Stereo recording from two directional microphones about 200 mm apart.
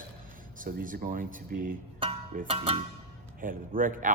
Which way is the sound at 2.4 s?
30° right (ahead or behind).